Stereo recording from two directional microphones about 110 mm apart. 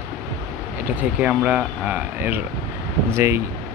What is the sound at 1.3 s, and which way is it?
Speech, 5° right (ahead or behind).